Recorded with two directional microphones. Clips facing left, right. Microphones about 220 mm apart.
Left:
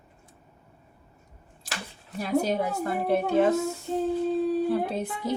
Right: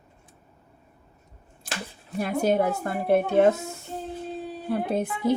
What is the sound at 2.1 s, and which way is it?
Speech, 50° right (ahead or behind).